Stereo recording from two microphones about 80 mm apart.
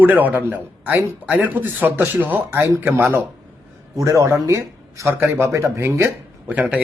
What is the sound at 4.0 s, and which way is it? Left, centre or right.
Speech, right.